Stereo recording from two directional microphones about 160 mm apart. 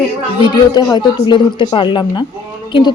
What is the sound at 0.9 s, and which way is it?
A man's voice, 30° left (ahead or behind).